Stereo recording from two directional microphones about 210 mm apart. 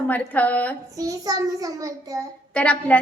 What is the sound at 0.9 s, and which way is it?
A child's voice, 15° right (ahead or behind).